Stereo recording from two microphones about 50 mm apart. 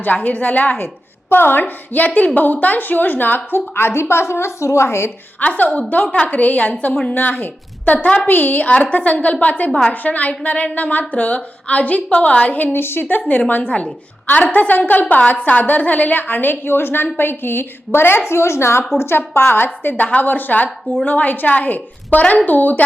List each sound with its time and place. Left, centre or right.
0.0 s a woman's voice: left
1.3 s a woman's voice: left
3.8 s a woman's voice: left
5.4 s a woman's voice: left
12.7 s a woman's voice: left
18.3 s a woman's voice: left